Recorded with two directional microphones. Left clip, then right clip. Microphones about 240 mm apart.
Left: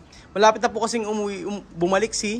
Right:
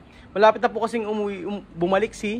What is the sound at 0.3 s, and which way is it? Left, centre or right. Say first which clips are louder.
A man's voice: even; centre.